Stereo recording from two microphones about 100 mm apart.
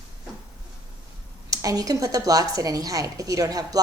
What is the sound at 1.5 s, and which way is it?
A woman's voice, 35° right (ahead or behind).